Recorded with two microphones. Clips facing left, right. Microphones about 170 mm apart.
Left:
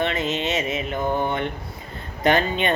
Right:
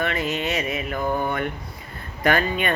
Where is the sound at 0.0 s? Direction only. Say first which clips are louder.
Left 1 dB; 20° left (ahead or behind).